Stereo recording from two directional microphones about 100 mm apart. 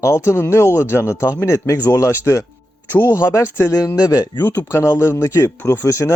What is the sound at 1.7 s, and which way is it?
Speech, 40° left (ahead or behind).